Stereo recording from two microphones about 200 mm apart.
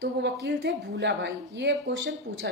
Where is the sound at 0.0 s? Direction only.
60° right (ahead or behind).